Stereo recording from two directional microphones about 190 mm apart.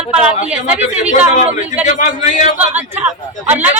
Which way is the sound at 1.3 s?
40° left (ahead or behind).